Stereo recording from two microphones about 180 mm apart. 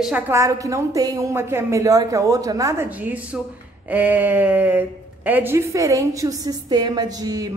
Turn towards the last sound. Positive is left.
turn(degrees=-20)  # may be behind; listen again after turning